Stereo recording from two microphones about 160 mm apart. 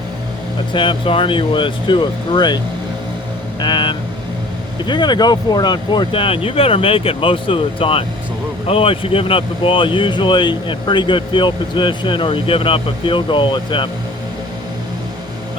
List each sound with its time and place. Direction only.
0.7 s speech: 30° left (ahead or behind)
3.6 s speech: 30° left (ahead or behind)